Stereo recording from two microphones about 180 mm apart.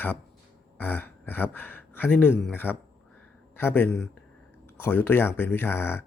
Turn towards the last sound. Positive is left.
turn(degrees=15)  # may be behind; listen again after turning